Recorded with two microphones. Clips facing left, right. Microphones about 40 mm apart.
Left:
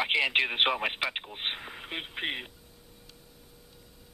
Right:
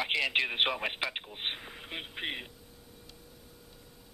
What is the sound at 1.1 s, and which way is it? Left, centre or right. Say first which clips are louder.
Radio: left 2 dB; centre.